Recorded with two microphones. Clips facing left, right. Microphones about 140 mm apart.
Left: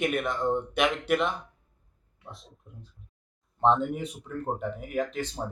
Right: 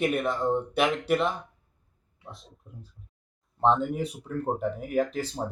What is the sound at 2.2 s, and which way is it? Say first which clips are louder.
Speech: right 1 dB; centre (ahead or behind).